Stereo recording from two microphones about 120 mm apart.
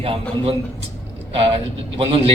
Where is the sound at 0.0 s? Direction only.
55° right (ahead or behind).